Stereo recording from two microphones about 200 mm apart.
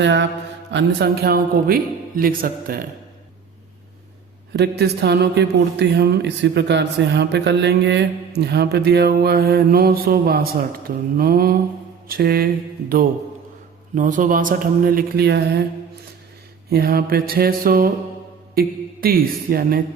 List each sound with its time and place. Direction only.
0.0 s mantra: 60° right (ahead or behind)
0.7 s speech: 60° right (ahead or behind)
4.8 s speech: 55° right (ahead or behind)
13.9 s speech: 40° right (ahead or behind); by 15.6 s 55° right (ahead or behind)
16.6 s speech: 50° right (ahead or behind)